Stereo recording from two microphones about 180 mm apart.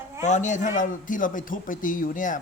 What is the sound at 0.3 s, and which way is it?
A man's voice, 45° left (ahead or behind).